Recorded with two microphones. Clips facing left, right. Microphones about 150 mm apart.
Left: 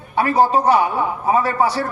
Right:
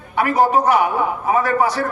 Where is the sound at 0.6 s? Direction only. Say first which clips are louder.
Even; 35° left (ahead or behind).